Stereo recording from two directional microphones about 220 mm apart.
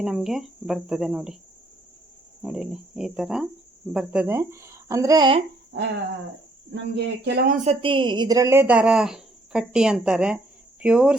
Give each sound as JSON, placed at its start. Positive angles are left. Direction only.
{"t": 0.0, "sound": "speech", "side_deg": 0}
{"t": 2.4, "sound": "speech", "side_deg": 0}
{"t": 5.7, "sound": "speech", "side_deg": -50}
{"t": 6.9, "sound": "speech", "side_deg": -50}
{"t": 7.6, "sound": "speech", "side_deg": -25}